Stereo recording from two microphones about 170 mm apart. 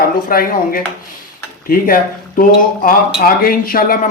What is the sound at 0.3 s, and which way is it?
Speech, 55° left (ahead or behind).